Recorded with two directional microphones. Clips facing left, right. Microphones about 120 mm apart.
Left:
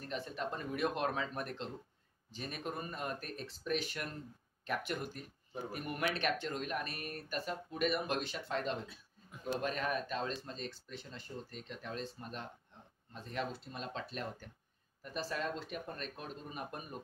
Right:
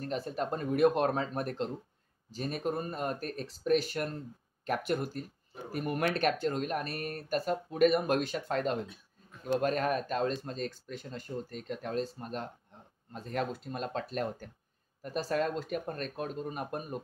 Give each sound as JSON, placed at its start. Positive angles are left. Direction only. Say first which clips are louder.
{"t": 0.0, "sound": "speech", "louder": "right 6 dB", "side_deg": -40}